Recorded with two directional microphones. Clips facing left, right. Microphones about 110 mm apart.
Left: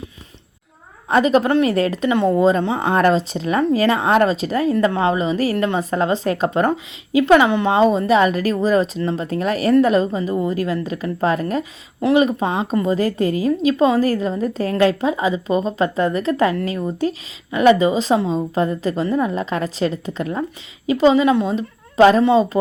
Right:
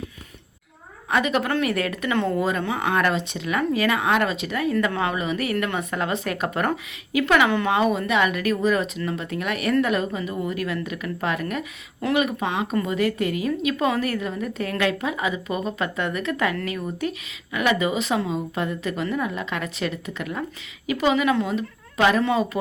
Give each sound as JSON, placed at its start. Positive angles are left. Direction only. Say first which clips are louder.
{"t": 1.1, "sound": "speech", "louder": "left 7 dB", "side_deg": 35}